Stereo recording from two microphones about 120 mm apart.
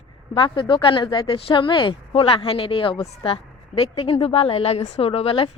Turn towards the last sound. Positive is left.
turn(degrees=50)  # may be behind; listen again after turning